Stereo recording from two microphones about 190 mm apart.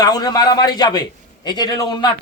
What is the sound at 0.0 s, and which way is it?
A man's voice, 20° left (ahead or behind).